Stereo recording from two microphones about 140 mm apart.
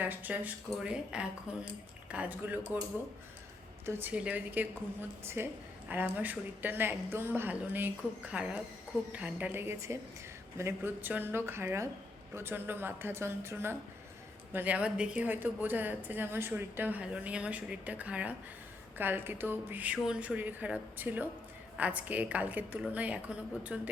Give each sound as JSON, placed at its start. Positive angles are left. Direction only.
{"t": 0.0, "sound": "a woman's voice", "side_deg": -15}
{"t": 3.8, "sound": "a woman's voice", "side_deg": -15}